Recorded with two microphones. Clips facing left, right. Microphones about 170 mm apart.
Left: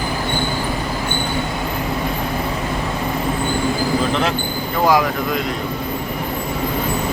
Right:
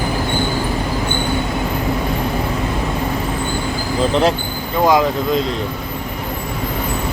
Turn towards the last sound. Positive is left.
turn(degrees=-20)  # may be behind; listen again after turning